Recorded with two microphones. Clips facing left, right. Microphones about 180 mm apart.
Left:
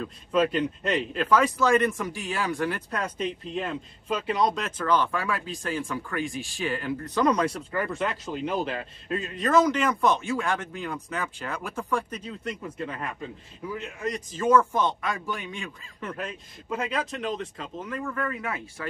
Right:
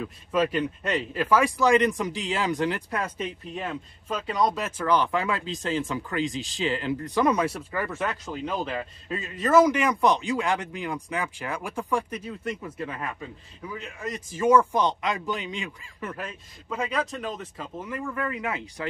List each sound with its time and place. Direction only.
0.0 s speech: 5° right (ahead or behind)
14.3 s speech: 10° right (ahead or behind)
16.6 s speech: centre (ahead or behind); by 18.9 s 15° right (ahead or behind)